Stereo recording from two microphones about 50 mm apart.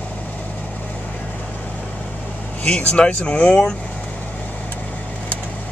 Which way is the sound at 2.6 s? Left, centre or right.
Left.